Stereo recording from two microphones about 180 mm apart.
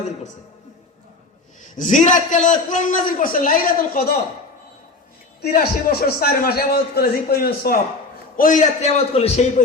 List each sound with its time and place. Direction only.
1.7 s a man's voice: 45° left (ahead or behind)
5.4 s a man's voice: 60° left (ahead or behind)
8.4 s a man's voice: 45° left (ahead or behind)